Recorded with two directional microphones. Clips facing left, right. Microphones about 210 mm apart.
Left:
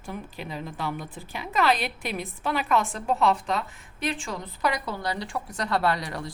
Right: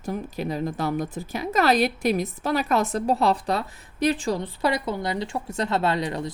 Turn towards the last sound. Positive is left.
turn(degrees=-20)  # may be behind; listen again after turning